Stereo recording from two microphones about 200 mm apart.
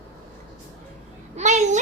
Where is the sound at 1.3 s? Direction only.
35° right (ahead or behind).